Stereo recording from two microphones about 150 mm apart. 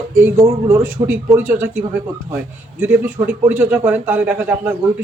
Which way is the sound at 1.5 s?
10° right (ahead or behind).